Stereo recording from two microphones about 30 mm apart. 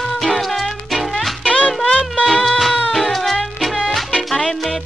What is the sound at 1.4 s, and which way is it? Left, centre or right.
Music, left.